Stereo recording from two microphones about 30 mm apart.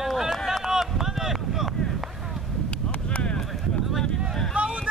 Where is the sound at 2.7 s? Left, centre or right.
Left.